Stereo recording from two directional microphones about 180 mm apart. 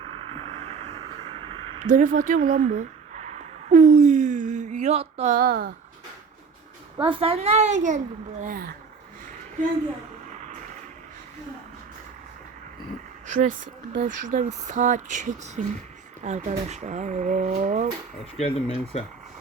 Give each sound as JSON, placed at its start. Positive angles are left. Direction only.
{"t": 0.7, "sound": "a sound", "side_deg": -35}
{"t": 1.8, "sound": "a sound", "side_deg": -45}
{"t": 5.4, "sound": "speech", "side_deg": -55}
{"t": 7.0, "sound": "a woman's voice", "side_deg": -30}
{"t": 10.3, "sound": "vehicle", "side_deg": -40}
{"t": 14.0, "sound": "speech", "side_deg": -45}
{"t": 18.3, "sound": "speech", "side_deg": 35}